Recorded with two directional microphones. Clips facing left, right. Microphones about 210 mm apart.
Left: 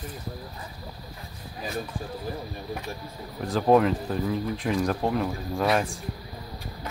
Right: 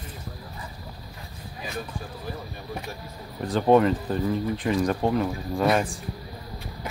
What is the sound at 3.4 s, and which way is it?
Speech, centre (ahead or behind).